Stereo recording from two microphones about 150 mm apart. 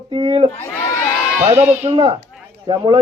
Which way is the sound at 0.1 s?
35° right (ahead or behind).